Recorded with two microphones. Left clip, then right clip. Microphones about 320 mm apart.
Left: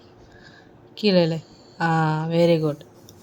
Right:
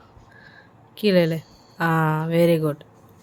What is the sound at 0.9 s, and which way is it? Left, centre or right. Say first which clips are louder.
A woman's voice: even; centre.